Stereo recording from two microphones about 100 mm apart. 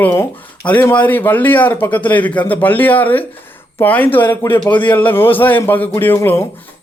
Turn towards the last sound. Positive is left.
turn(degrees=20)  # may be behind; listen again after turning